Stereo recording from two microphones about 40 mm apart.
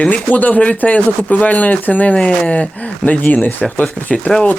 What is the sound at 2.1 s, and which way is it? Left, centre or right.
Speech, left.